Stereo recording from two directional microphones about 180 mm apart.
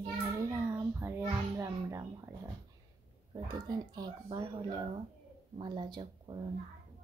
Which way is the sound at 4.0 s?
20° right (ahead or behind).